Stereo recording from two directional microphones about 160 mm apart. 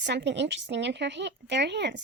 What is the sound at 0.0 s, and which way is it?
Speech, 90° right.